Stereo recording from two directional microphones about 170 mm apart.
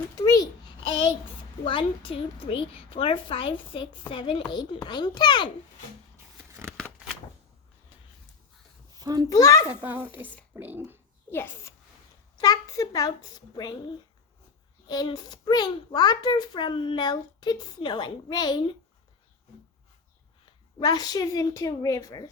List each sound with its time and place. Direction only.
0.2 s babbling: 20° left (ahead or behind)
1.6 s a woman's voice: 30° left (ahead or behind)
6.5 s a sound: 15° right (ahead or behind)
9.0 s a child's voice: 20° right (ahead or behind)
9.3 s a child's voice: 20° left (ahead or behind)
9.8 s a woman's voice: 10° right (ahead or behind)
11.3 s a child's voice: 15° left (ahead or behind)
14.8 s a child's voice: 25° left (ahead or behind)
20.4 s a woman's voice: 25° left (ahead or behind)